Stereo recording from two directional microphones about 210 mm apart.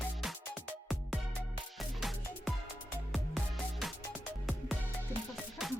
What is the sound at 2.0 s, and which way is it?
Music, centre (ahead or behind).